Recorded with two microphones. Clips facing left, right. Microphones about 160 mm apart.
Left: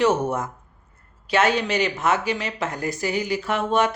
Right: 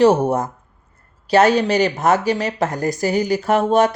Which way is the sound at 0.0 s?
35° right (ahead or behind).